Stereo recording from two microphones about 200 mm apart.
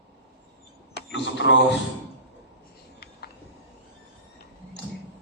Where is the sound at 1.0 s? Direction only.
65° left (ahead or behind).